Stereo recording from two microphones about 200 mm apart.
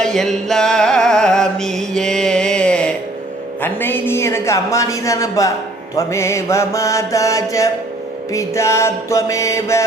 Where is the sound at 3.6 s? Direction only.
10° left (ahead or behind).